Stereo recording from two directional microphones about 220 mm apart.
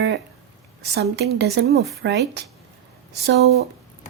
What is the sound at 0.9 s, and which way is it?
A woman's voice, 50° right (ahead or behind).